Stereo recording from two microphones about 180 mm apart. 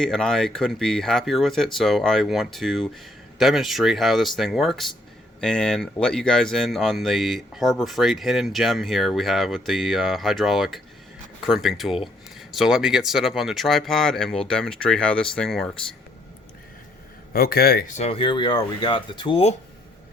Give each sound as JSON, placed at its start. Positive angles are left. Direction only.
{"t": 0.0, "sound": "speech", "side_deg": 5}
{"t": 17.3, "sound": "speech", "side_deg": 55}